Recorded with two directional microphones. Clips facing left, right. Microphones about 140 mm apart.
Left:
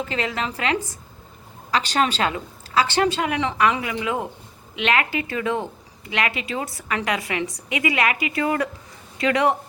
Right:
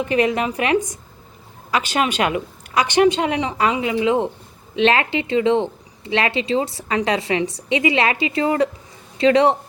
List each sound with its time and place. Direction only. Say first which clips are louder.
0.0 s a woman's voice: right 7 dB; 20° right (ahead or behind)